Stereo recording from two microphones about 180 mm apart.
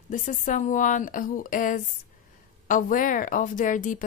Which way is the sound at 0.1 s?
45° left (ahead or behind).